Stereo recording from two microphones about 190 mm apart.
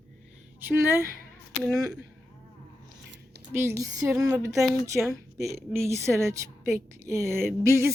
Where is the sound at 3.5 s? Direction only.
15° right (ahead or behind).